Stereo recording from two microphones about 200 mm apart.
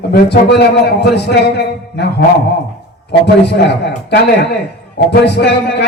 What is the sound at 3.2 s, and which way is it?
Speech, 55° left (ahead or behind).